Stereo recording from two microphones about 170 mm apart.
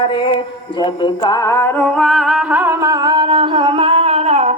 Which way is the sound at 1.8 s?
Centre (ahead or behind).